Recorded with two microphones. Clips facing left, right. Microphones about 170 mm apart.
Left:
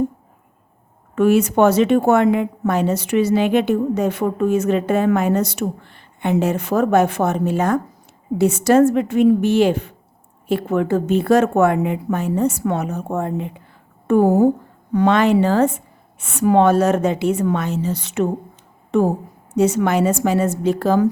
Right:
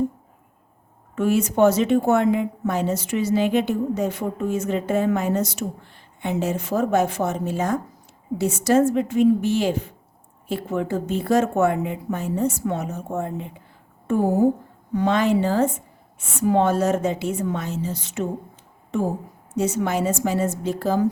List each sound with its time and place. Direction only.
1.1 s a woman's voice: 70° left (ahead or behind)